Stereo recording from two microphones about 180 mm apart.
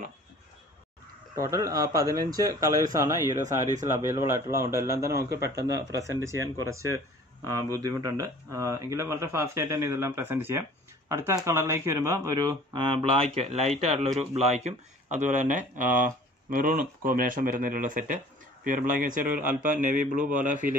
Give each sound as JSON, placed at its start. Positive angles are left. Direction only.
{"t": 1.3, "sound": "speech", "side_deg": -20}